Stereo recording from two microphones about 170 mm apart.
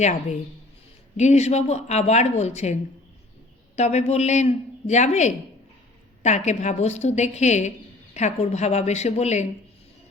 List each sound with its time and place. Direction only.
0.0 s speech: 40° left (ahead or behind)
3.8 s speech: 40° left (ahead or behind)